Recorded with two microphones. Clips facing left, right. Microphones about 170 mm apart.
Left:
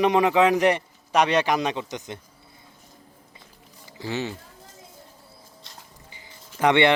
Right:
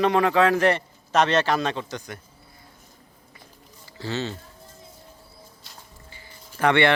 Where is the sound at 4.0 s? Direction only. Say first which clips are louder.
Even; 15° left (ahead or behind).